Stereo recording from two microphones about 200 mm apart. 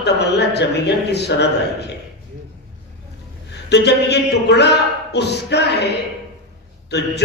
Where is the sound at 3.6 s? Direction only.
60° left (ahead or behind).